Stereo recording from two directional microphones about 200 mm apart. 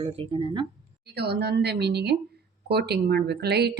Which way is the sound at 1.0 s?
55° right (ahead or behind).